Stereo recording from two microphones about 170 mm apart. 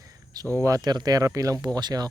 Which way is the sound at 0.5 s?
20° right (ahead or behind).